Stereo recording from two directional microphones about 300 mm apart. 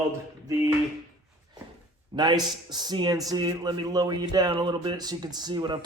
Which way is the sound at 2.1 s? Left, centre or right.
Centre.